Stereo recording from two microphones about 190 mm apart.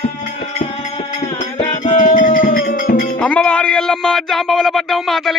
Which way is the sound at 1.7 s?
40° left (ahead or behind).